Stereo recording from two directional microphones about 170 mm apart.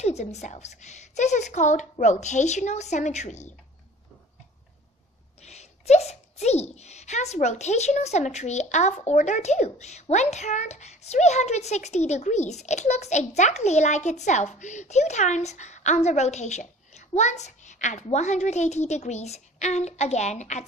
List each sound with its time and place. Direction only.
0.0 s a child's voice: 40° left (ahead or behind)
5.4 s a child's voice: 40° left (ahead or behind)